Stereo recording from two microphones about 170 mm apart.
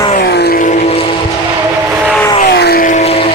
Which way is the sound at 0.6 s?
40° left (ahead or behind).